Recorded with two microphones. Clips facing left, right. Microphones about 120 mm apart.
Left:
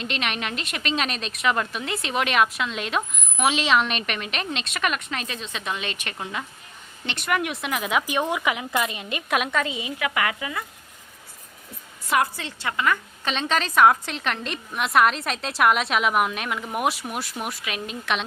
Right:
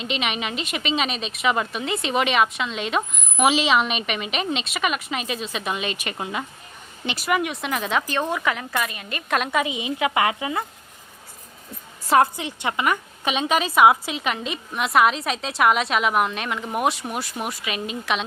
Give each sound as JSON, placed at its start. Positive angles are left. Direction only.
{"t": 0.0, "sound": "a woman's voice", "side_deg": 0}
{"t": 9.5, "sound": "speech", "side_deg": -15}
{"t": 12.0, "sound": "a woman's voice", "side_deg": -30}
{"t": 12.4, "sound": "a woman's voice", "side_deg": -15}